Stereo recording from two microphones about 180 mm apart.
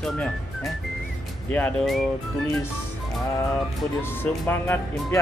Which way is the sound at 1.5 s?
5° left (ahead or behind).